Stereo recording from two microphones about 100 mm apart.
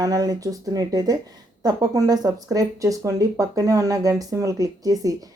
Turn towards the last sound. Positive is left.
turn(degrees=-35)  # may be behind; listen again after turning